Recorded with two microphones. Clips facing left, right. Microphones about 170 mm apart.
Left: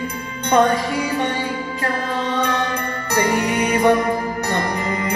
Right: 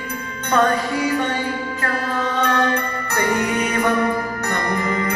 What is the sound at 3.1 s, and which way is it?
Music, 15° left (ahead or behind).